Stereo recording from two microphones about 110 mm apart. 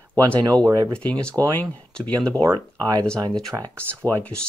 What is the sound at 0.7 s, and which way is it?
Speech, 30° right (ahead or behind).